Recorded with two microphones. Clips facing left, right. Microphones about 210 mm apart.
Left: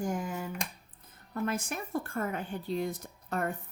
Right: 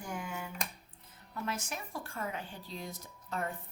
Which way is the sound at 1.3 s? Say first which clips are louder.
Left 6 dB; 55° left (ahead or behind).